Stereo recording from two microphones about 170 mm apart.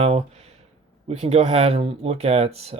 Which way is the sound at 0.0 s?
35° right (ahead or behind).